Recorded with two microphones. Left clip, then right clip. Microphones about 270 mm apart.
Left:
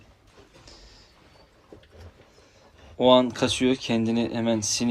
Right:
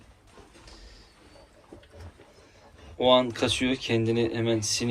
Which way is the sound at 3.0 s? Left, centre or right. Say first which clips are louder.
Left 3 dB; centre.